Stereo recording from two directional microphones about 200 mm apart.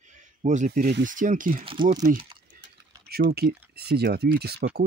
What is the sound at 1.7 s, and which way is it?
Speech, 25° right (ahead or behind).